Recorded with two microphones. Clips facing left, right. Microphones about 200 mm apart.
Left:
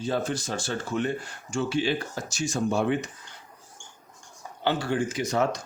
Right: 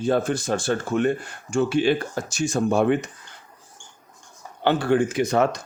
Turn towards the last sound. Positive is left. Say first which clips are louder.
# right 5 dB
turn(degrees=-60)  # may be behind; listen again after turning